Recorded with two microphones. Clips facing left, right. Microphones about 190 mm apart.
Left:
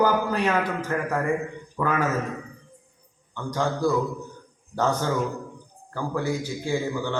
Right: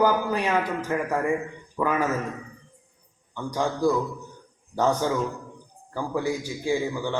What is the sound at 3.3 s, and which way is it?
A man's voice, 15° right (ahead or behind).